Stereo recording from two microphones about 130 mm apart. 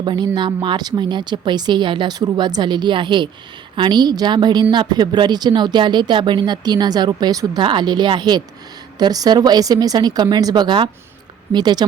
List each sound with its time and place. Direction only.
0.0 s speech: 35° right (ahead or behind)